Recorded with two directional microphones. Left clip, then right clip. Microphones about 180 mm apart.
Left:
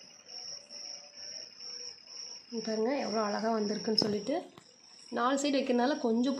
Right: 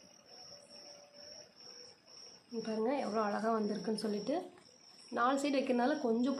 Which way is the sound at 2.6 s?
30° left (ahead or behind).